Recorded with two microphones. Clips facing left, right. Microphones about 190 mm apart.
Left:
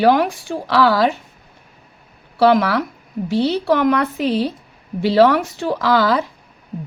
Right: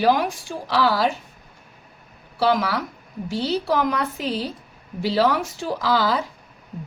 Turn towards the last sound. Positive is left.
turn(degrees=65)  # may be behind; listen again after turning